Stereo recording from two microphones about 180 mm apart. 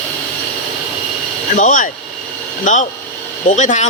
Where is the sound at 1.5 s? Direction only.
45° left (ahead or behind).